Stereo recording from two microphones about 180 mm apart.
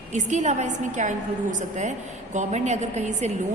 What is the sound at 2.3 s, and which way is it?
A woman's voice, 40° right (ahead or behind).